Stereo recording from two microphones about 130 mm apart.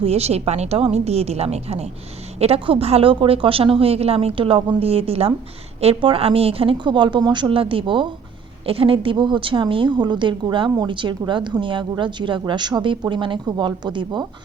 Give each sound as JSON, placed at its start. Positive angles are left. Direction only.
{"t": 0.0, "sound": "a woman's voice", "side_deg": -55}